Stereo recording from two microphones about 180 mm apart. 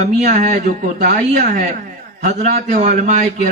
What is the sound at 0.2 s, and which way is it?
A man's voice, 40° right (ahead or behind).